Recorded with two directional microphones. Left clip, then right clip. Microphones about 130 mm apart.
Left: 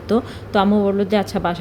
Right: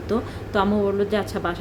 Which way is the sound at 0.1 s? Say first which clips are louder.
Left 5 dB; 30° left (ahead or behind).